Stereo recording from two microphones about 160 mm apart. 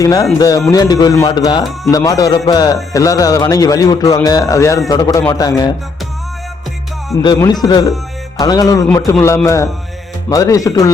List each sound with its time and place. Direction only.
0.0 s a man's voice: 20° left (ahead or behind)
7.1 s a man's voice: 25° left (ahead or behind)